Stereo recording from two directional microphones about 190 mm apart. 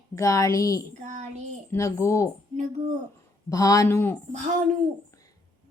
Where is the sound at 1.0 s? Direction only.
35° right (ahead or behind).